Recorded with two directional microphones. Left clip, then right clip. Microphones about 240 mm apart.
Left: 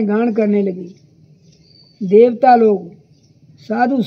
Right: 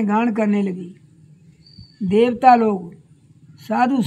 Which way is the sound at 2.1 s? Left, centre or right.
Right.